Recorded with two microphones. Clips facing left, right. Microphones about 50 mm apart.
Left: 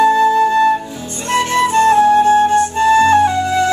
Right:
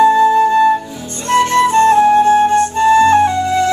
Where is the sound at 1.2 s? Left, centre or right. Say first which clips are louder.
Right 3 dB; centre.